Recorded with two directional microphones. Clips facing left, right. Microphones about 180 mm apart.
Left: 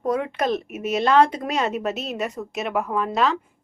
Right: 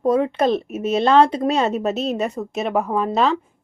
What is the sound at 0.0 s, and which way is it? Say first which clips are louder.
Speech: right 6 dB; 25° right (ahead or behind).